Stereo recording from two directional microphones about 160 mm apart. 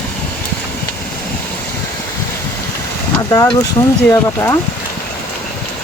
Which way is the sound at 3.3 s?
25° left (ahead or behind).